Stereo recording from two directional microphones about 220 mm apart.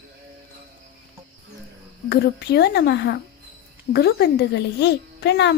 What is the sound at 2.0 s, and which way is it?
A child's voice, 45° left (ahead or behind).